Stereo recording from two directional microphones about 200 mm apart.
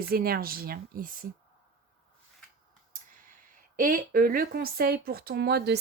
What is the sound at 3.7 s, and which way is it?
Speech, 45° right (ahead or behind).